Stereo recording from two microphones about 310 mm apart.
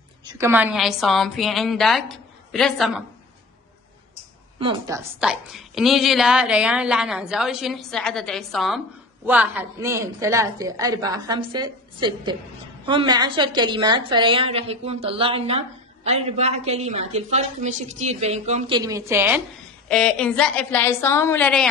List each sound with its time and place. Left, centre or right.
0.2 s a woman's voice: centre
4.6 s a woman's voice: centre